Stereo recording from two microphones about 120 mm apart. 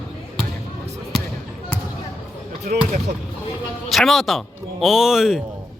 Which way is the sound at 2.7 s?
90° right.